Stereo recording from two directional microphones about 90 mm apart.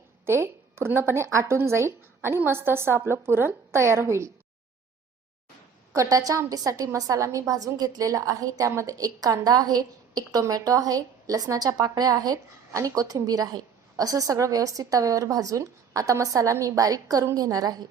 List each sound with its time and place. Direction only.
0.3 s speech: 30° right (ahead or behind)
5.9 s a woman's voice: 40° right (ahead or behind)